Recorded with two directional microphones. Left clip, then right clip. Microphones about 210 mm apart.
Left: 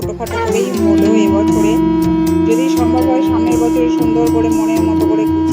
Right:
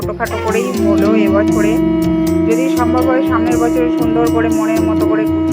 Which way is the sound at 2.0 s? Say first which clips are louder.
Left 1 dB; centre (ahead or behind).